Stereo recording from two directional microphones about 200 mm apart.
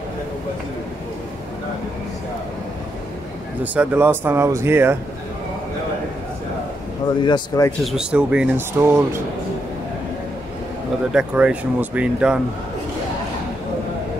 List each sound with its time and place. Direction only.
3.6 s speech: 5° right (ahead or behind)
7.2 s speech: 20° left (ahead or behind)
7.8 s speech: 5° right (ahead or behind)
11.1 s speech: 5° right (ahead or behind)